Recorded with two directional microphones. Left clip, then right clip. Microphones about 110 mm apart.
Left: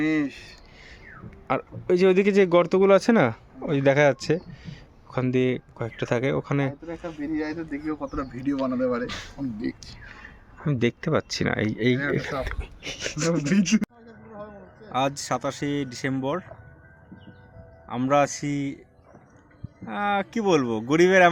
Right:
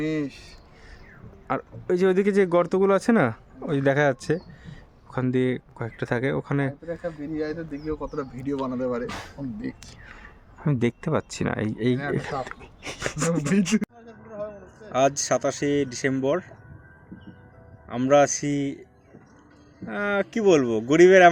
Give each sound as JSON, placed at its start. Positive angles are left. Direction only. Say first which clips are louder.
{"t": 0.0, "sound": "speech", "louder": "left 3 dB", "side_deg": -20}
{"t": 1.5, "sound": "speech", "louder": "left 2 dB", "side_deg": -5}
{"t": 8.4, "sound": "speech", "louder": "left 3 dB", "side_deg": -40}
{"t": 9.6, "sound": "a sound", "louder": "left 3 dB", "side_deg": -35}
{"t": 10.6, "sound": "speech", "louder": "even", "side_deg": -25}
{"t": 12.8, "sound": "speech", "louder": "even", "side_deg": -35}
{"t": 14.9, "sound": "speech", "louder": "right 4 dB", "side_deg": 45}
{"t": 17.8, "sound": "speech", "louder": "right 3 dB", "side_deg": 55}
{"t": 19.9, "sound": "speech", "louder": "even", "side_deg": 55}